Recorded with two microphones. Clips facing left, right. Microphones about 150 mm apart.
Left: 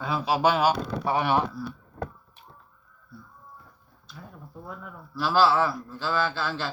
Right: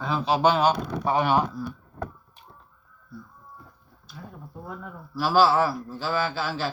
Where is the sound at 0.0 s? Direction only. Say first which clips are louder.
Right 2 dB; 5° left (ahead or behind).